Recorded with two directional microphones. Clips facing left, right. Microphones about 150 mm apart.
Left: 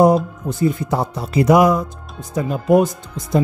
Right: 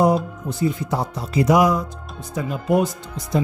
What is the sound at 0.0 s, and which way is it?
Speech, 50° left (ahead or behind).